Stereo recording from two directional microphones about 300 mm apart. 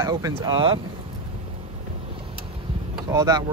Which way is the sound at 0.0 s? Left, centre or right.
Centre.